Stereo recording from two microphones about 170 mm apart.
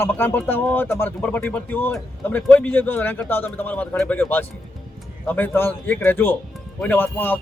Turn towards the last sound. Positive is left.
turn(degrees=10)  # may be behind; listen again after turning